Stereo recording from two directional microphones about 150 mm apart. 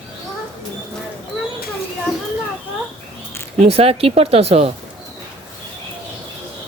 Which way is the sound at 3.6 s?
45° right (ahead or behind).